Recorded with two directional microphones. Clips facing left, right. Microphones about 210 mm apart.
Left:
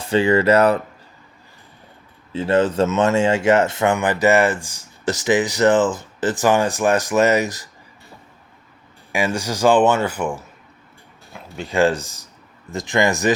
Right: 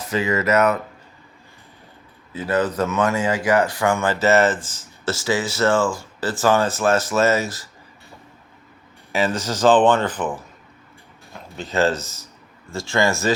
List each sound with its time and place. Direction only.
0.0 s speech: 30° left (ahead or behind)
2.3 s speech: 25° left (ahead or behind)
9.1 s speech: 10° left (ahead or behind)